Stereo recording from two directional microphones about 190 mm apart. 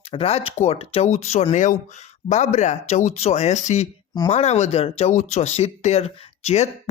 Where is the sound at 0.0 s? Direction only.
30° left (ahead or behind).